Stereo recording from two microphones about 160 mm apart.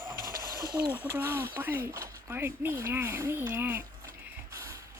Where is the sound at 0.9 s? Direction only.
15° right (ahead or behind).